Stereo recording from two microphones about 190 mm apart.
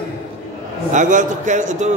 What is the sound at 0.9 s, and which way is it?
Speech, 40° right (ahead or behind).